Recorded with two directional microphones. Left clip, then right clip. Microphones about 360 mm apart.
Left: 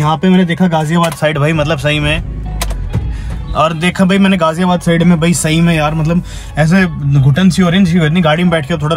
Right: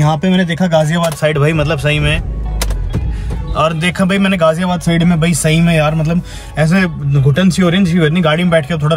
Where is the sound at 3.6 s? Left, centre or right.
Centre.